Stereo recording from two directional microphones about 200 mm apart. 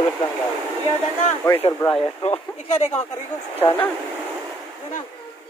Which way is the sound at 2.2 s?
35° left (ahead or behind).